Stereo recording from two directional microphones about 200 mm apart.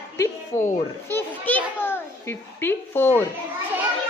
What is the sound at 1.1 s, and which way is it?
A child's voice, 10° left (ahead or behind).